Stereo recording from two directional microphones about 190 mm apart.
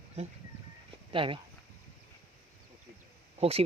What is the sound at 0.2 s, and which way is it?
Speech, 35° right (ahead or behind).